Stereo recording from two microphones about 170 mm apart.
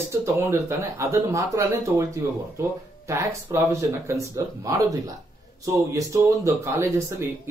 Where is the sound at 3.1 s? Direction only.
15° right (ahead or behind).